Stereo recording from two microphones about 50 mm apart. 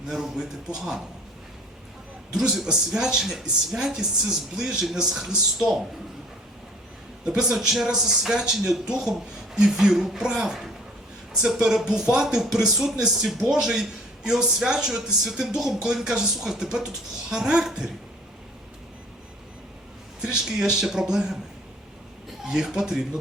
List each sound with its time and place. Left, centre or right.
0.1 s speech: centre
2.4 s speech: centre
7.3 s speech: centre
7.5 s speech: centre
20.2 s speech: centre
22.4 s speech: centre